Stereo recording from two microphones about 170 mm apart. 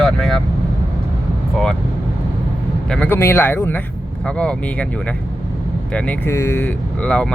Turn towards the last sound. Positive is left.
turn(degrees=5)  # may be behind; listen again after turning